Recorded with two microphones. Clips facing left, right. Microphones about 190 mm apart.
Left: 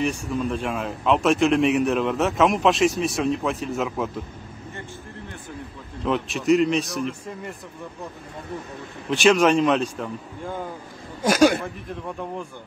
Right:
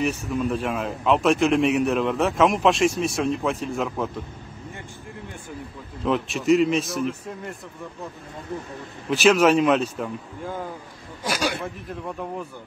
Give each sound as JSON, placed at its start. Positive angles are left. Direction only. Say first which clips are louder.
{"t": 0.0, "sound": "a man's voice", "louder": "even", "side_deg": -5}
{"t": 6.0, "sound": "a man's voice", "louder": "even", "side_deg": 0}
{"t": 9.1, "sound": "a man's voice", "louder": "even", "side_deg": -5}
{"t": 11.2, "sound": "speech", "louder": "left 9 dB", "side_deg": 45}
{"t": 11.6, "sound": "a man's voice", "louder": "even", "side_deg": 0}